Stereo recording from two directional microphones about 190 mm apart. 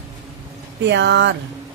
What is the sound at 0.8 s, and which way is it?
Speech, 65° right (ahead or behind).